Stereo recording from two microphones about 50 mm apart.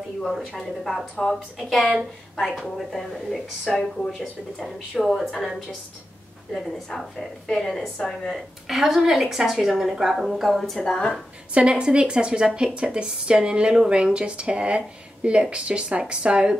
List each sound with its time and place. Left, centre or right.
0.2 s a woman's voice: centre
6.5 s a woman's voice: centre
8.6 s a woman's voice: centre
10.8 s a woman's voice: centre
11.5 s speech: centre